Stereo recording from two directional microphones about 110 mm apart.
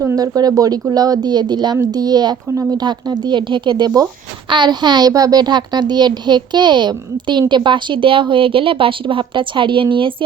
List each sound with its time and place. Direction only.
0.0 s speech: 25° right (ahead or behind)
0.3 s a child's voice: 35° right (ahead or behind); by 10.2 s 50° right (ahead or behind)